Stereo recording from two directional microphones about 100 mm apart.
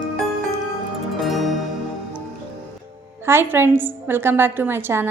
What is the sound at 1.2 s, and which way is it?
Zither, centre (ahead or behind).